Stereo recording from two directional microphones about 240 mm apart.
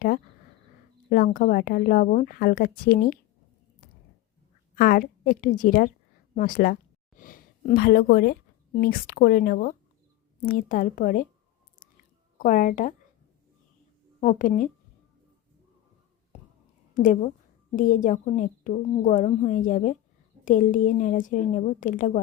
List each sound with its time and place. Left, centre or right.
1.1 s a woman's voice: left
4.7 s a woman's voice: left
12.4 s a woman's voice: left
14.2 s a woman's voice: left
16.9 s a woman's voice: left